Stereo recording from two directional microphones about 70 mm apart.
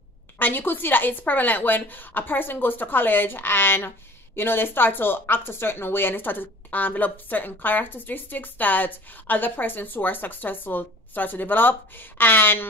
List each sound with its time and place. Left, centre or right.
0.4 s speech: left